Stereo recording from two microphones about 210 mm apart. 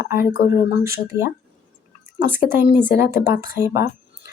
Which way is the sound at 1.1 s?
15° left (ahead or behind).